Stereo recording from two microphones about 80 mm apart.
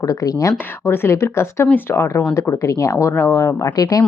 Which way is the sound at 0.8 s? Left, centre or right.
Left.